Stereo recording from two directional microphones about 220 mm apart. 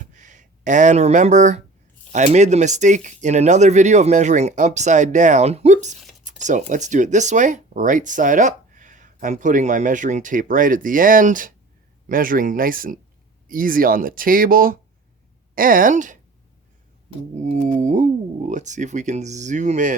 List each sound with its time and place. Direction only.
0.0 s a sound: 35° right (ahead or behind)
2.1 s speech: 30° right (ahead or behind)
17.3 s speech: 35° right (ahead or behind)